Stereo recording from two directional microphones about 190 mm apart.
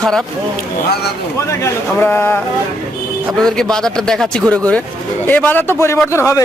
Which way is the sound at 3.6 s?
5° left (ahead or behind).